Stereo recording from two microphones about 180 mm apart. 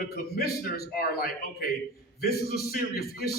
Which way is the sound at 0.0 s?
60° left (ahead or behind).